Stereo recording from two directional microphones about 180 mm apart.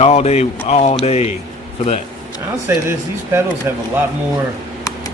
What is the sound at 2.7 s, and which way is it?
Speech, 15° right (ahead or behind).